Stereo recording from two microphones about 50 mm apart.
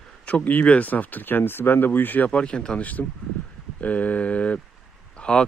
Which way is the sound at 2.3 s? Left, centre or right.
Centre.